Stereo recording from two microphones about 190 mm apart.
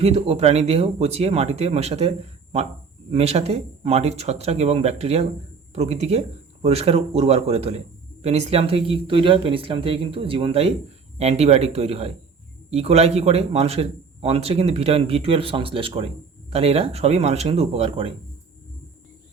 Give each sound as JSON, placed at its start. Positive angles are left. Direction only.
{"t": 0.0, "sound": "a man's voice", "side_deg": -35}